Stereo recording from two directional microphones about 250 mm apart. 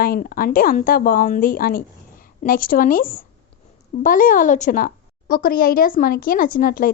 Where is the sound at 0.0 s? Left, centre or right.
Left.